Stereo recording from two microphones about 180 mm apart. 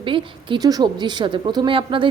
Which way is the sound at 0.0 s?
30° right (ahead or behind).